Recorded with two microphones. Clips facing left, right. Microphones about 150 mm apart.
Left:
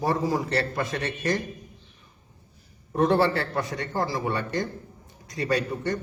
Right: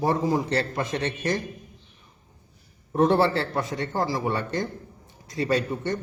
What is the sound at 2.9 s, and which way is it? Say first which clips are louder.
A man's voice: right 1 dB; 25° right (ahead or behind).